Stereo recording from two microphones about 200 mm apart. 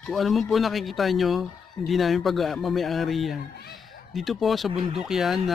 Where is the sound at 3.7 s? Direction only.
Centre (ahead or behind).